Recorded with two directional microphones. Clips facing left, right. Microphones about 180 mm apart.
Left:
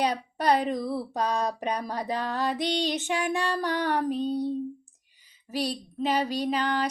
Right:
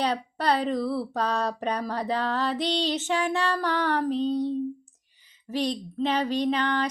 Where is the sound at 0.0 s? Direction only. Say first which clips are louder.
Even; 15° left (ahead or behind).